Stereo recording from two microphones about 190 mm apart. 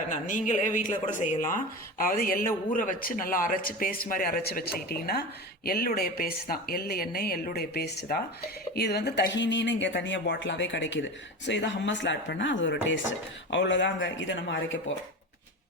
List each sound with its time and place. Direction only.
0.3 s speech: 40° left (ahead or behind); by 14.8 s 80° left